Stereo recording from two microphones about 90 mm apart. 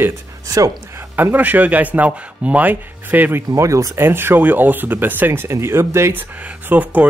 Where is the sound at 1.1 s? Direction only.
20° right (ahead or behind).